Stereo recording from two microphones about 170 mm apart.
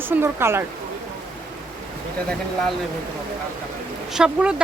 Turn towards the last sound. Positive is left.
turn(degrees=-5)  # may be behind; listen again after turning